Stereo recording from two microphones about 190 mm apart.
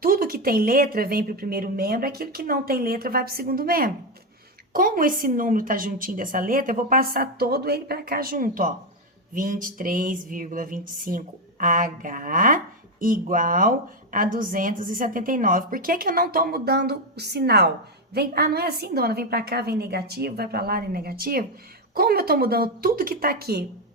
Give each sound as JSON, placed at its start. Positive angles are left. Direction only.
{"t": 0.0, "sound": "a woman's voice", "side_deg": -50}